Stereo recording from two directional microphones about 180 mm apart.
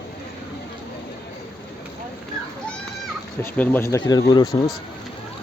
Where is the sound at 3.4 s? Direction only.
15° left (ahead or behind).